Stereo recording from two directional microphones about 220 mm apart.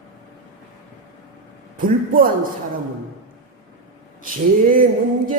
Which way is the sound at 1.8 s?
40° right (ahead or behind).